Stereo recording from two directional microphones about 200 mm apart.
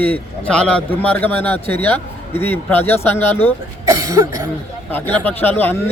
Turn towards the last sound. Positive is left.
turn(degrees=10)  # may be behind; listen again after turning